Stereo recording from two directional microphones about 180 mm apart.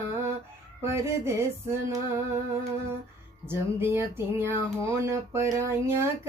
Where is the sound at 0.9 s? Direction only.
15° right (ahead or behind).